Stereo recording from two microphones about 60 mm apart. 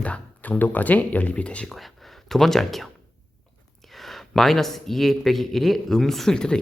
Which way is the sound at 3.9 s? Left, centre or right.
Centre.